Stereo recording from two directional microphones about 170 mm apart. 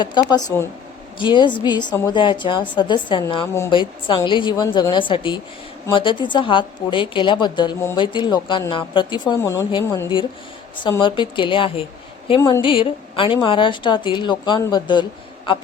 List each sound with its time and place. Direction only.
0.0 s a woman's voice: 25° left (ahead or behind)
9.4 s a woman's voice: 15° left (ahead or behind)